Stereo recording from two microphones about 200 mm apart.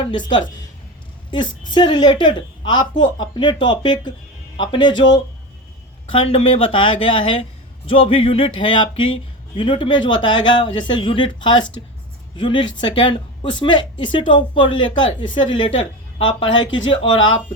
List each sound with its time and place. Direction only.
0.0 s speech: 25° left (ahead or behind)
1.7 s speech: 20° left (ahead or behind)
6.1 s speech: 30° left (ahead or behind)